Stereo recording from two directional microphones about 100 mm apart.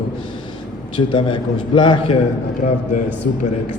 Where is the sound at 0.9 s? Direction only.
60° left (ahead or behind).